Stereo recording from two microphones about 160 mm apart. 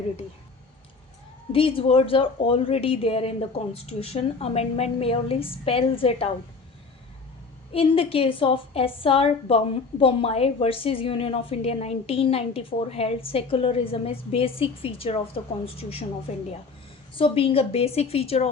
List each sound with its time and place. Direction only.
1.5 s a woman's voice: 35° left (ahead or behind)
7.7 s a woman's voice: 35° left (ahead or behind)
17.2 s a woman's voice: 35° left (ahead or behind)